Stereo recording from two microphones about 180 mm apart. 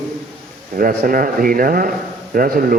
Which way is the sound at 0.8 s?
50° right (ahead or behind).